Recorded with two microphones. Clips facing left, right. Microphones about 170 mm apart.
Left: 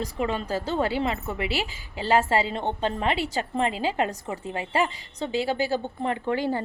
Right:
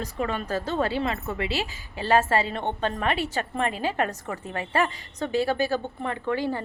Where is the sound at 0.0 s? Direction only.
30° left (ahead or behind).